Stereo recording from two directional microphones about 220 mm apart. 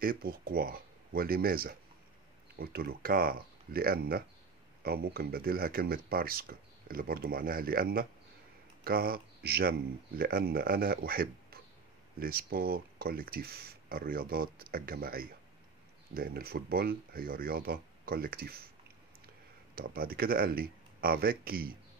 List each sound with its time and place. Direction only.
0.0 s speech: 40° right (ahead or behind)
19.7 s speech: 40° right (ahead or behind)